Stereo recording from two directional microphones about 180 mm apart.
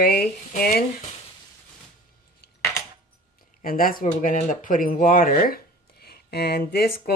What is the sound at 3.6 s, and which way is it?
Speech, 50° left (ahead or behind).